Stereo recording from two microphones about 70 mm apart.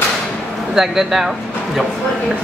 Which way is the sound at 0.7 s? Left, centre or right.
Centre.